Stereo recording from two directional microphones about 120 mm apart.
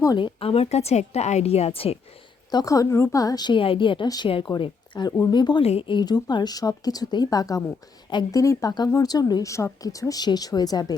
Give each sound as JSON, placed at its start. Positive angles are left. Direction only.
{"t": 0.0, "sound": "a woman's voice", "side_deg": 35}
{"t": 2.5, "sound": "a woman's voice", "side_deg": 30}